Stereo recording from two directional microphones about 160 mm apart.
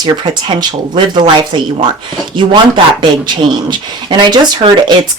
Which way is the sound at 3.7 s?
30° right (ahead or behind).